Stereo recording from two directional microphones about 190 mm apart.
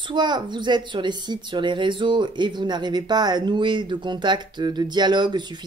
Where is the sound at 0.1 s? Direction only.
25° right (ahead or behind).